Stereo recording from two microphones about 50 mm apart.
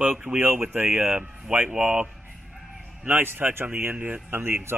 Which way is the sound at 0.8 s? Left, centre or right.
Right.